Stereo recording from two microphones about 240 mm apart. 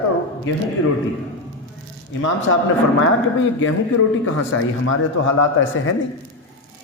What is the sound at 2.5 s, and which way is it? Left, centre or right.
A man's voice, left.